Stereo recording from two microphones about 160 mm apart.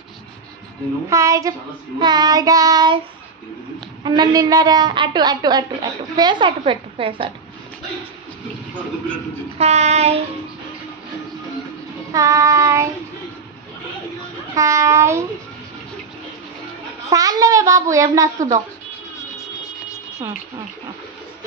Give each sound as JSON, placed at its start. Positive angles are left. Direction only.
{"t": 1.0, "sound": "a woman's voice", "side_deg": -20}
{"t": 4.0, "sound": "a woman's voice", "side_deg": -25}
{"t": 9.6, "sound": "child singing", "side_deg": -45}
{"t": 12.1, "sound": "a woman's voice", "side_deg": -20}
{"t": 14.5, "sound": "train", "side_deg": -20}
{"t": 17.1, "sound": "a woman's voice", "side_deg": -20}